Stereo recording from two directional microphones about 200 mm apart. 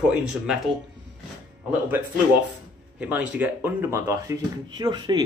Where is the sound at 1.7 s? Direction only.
10° right (ahead or behind).